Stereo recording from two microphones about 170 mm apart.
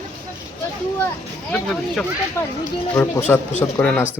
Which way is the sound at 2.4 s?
15° left (ahead or behind).